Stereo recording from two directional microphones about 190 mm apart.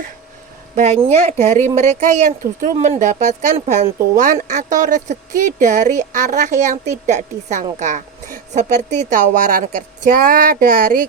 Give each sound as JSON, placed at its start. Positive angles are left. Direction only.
{"t": 0.8, "sound": "speech", "side_deg": -35}